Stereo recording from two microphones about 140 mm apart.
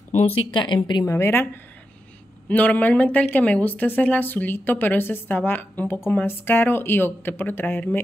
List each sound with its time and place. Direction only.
0.1 s speech: 40° left (ahead or behind)
1.0 s a woman's voice: 15° left (ahead or behind)